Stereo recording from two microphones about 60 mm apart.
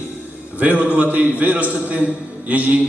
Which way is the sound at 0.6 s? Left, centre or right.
Right.